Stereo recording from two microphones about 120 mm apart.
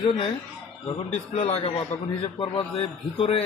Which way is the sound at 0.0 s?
45° left (ahead or behind).